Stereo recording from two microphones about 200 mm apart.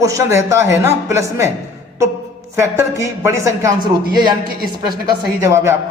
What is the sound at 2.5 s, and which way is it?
Speech, 15° right (ahead or behind).